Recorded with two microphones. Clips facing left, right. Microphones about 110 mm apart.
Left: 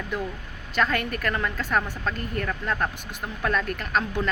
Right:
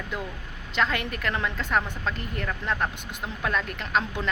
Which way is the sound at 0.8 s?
20° right (ahead or behind).